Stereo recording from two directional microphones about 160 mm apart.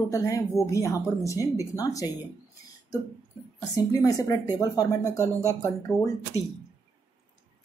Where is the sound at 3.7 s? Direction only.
20° left (ahead or behind).